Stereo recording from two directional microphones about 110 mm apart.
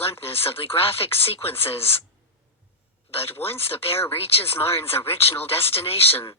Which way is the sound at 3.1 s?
60° left (ahead or behind).